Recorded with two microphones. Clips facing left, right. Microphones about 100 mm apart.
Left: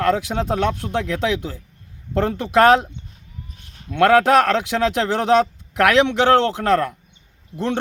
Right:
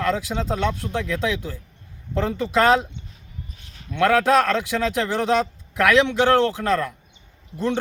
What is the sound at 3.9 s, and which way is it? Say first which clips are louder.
Speech: left 4 dB; 60° left (ahead or behind).